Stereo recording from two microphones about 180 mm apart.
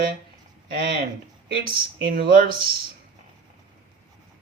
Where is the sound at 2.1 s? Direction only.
55° right (ahead or behind).